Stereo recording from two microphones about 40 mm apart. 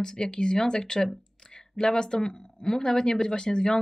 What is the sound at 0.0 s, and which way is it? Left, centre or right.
Speech, centre.